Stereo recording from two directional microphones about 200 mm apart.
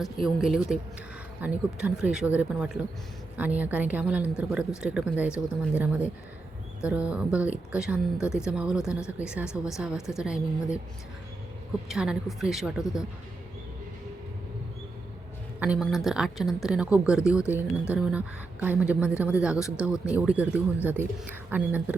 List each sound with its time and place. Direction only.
0.4 s a woman's voice: centre (ahead or behind)
11.9 s a woman's voice: centre (ahead or behind)
12.8 s speech: 15° left (ahead or behind)
15.6 s a woman's voice: 5° right (ahead or behind)